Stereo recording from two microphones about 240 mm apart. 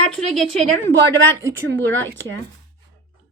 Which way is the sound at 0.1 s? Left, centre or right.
Centre.